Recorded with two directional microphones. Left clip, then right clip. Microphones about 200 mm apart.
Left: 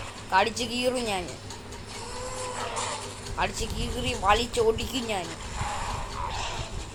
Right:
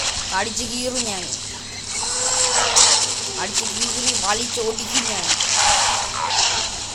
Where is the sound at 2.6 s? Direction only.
50° right (ahead or behind).